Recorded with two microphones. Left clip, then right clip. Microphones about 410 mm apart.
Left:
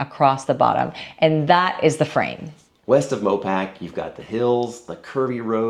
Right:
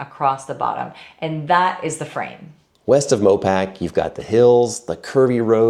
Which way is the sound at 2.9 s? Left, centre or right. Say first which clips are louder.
Right 4 dB; right.